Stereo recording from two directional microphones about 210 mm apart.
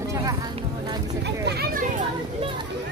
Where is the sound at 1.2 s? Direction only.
50° right (ahead or behind).